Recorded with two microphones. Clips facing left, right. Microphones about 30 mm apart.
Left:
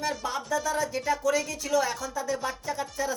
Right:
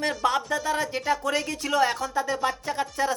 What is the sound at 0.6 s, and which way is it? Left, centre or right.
Speech, right.